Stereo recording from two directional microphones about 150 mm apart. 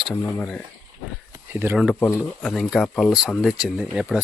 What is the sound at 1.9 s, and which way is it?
Speech, 15° left (ahead or behind).